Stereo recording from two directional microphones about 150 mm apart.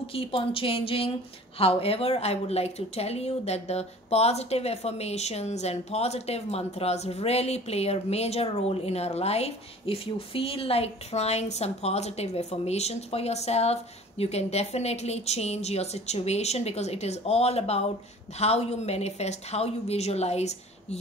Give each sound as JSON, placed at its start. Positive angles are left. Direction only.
{"t": 0.0, "sound": "a woman's voice", "side_deg": 40}